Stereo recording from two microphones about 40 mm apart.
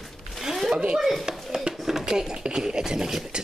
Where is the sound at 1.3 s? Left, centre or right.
Right.